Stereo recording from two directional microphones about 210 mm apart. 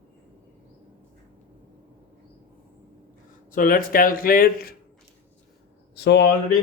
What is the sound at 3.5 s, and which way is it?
A man's voice, 40° left (ahead or behind).